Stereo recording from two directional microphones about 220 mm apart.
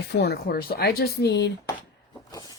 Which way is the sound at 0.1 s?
45° left (ahead or behind).